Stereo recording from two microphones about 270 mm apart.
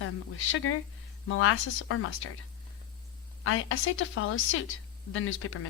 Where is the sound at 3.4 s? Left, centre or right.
Left.